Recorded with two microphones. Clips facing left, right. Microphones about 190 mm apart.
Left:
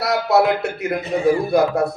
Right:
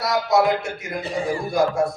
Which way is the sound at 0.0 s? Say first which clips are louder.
Left 2 dB; 65° left (ahead or behind).